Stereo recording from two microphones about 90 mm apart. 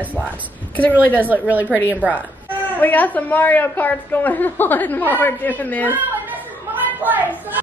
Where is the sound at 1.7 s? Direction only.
20° left (ahead or behind).